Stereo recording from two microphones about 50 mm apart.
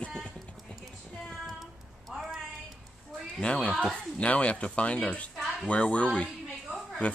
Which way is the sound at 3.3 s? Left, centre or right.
Left.